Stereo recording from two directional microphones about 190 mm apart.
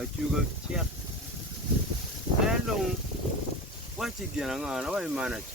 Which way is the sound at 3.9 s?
Centre (ahead or behind).